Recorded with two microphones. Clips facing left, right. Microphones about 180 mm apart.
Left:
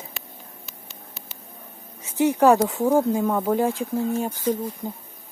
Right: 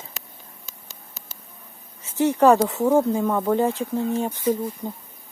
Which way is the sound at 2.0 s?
15° left (ahead or behind).